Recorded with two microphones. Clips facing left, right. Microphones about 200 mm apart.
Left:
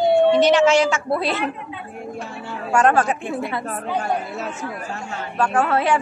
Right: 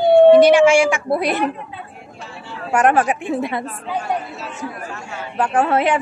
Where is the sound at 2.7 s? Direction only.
15° right (ahead or behind).